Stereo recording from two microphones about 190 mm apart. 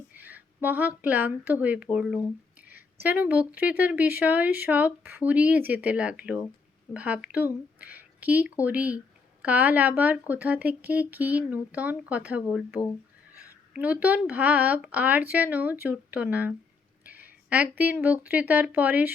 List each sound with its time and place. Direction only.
0.1 s speech: 10° right (ahead or behind)
17.0 s a sound: 10° right (ahead or behind)
18.0 s speech: 10° right (ahead or behind)